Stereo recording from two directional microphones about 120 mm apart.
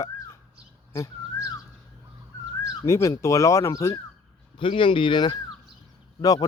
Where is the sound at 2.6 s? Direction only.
25° left (ahead or behind).